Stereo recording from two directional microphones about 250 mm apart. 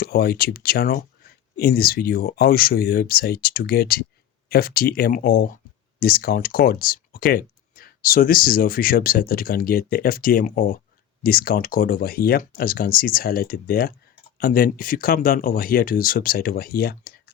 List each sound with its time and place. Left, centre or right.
0.0 s speech: left